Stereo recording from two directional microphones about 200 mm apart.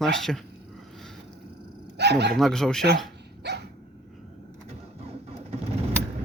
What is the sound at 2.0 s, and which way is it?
Speech, 55° right (ahead or behind).